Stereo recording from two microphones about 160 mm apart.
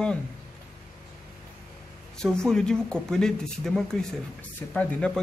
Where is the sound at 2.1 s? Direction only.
5° left (ahead or behind).